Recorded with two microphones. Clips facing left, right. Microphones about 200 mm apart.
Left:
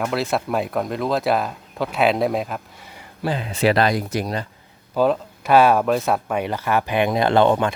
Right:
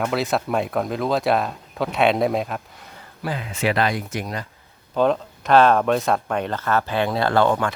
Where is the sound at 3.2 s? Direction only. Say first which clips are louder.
Left 4 dB; 30° left (ahead or behind).